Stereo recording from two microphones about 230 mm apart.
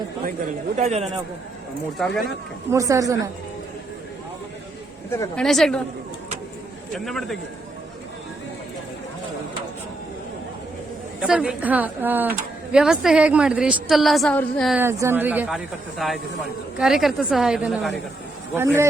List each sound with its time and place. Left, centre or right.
0.8 s a man's voice: right
2.6 s speech: centre
5.1 s speech: centre
6.9 s speech: centre
11.2 s speech: centre
14.8 s speech: centre
18.5 s speech: centre